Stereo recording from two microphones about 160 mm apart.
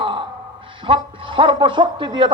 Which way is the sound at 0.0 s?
30° right (ahead or behind).